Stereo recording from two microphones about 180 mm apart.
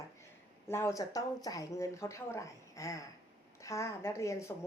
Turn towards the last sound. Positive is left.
turn(degrees=15)  # may be behind; listen again after turning